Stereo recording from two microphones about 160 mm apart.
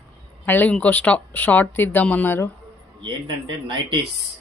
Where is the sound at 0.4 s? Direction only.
10° left (ahead or behind).